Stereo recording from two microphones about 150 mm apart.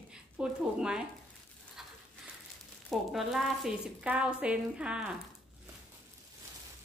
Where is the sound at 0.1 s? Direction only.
5° right (ahead or behind).